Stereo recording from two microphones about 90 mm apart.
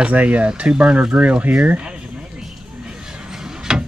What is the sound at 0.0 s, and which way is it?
Speech, 15° right (ahead or behind).